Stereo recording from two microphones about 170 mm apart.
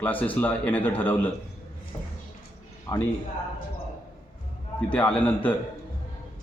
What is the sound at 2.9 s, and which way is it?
Speech, 25° left (ahead or behind).